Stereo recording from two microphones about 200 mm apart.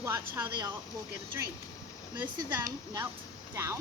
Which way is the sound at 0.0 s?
15° right (ahead or behind).